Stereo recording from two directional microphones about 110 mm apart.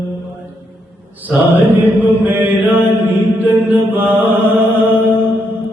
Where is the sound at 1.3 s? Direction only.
15° right (ahead or behind).